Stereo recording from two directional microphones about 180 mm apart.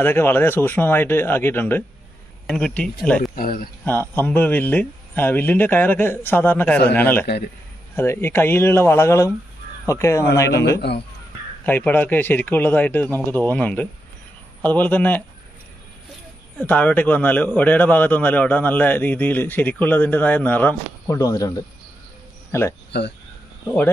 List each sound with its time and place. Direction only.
0.0 s a man's voice: 10° left (ahead or behind)
3.3 s speech: 55° left (ahead or behind)
3.8 s a man's voice: 10° left (ahead or behind)
16.5 s a man's voice: 10° left (ahead or behind)
22.5 s a man's voice: 15° left (ahead or behind)
22.8 s speech: 70° left (ahead or behind)